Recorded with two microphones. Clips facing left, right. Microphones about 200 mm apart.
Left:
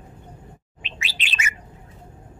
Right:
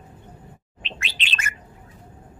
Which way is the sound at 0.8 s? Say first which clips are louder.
Right 1 dB; 10° left (ahead or behind).